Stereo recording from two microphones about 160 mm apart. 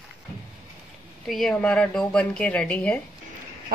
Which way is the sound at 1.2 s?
Centre (ahead or behind).